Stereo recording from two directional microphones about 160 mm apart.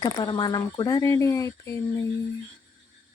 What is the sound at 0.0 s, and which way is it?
Speech, 25° left (ahead or behind).